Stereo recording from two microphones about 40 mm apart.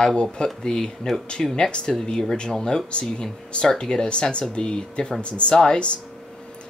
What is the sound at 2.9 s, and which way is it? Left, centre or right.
Speech, left.